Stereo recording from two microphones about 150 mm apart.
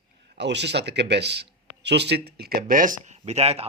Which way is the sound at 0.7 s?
90° right.